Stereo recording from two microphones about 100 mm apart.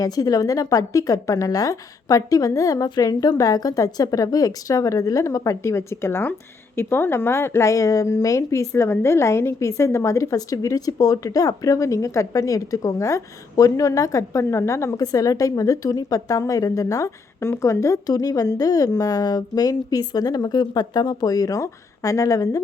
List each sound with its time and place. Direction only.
0.0 s a woman's voice: 35° left (ahead or behind)